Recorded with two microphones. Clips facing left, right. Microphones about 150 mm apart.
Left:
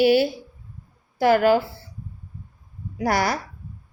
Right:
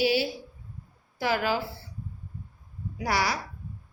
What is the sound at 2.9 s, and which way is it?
Speech, 50° left (ahead or behind).